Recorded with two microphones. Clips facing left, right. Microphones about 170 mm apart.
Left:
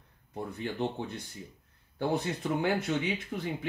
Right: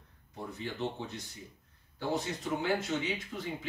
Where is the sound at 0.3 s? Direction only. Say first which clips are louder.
Left 4 dB; 55° left (ahead or behind).